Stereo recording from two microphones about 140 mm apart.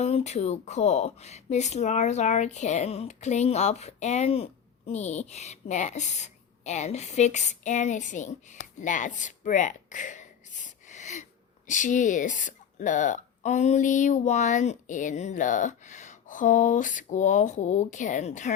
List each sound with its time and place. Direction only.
0.0 s a woman's voice: 50° left (ahead or behind)